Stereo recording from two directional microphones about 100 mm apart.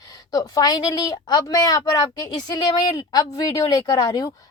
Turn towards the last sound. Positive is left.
turn(degrees=45)  # may be behind; listen again after turning